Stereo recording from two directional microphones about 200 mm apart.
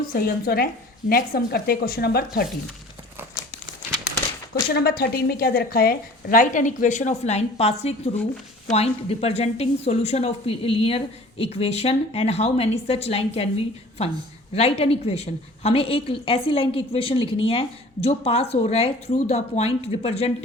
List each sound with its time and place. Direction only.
0.1 s speech: 50° left (ahead or behind)
4.7 s a woman's voice: 50° left (ahead or behind); by 20.3 s 30° left (ahead or behind)